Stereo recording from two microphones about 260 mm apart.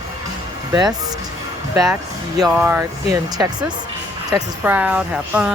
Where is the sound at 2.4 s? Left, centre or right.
Centre.